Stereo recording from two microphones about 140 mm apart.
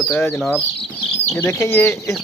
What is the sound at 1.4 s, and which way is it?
Speech, 15° left (ahead or behind).